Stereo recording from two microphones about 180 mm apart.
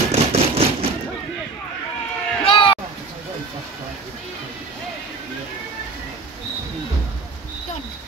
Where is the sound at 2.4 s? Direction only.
30° left (ahead or behind).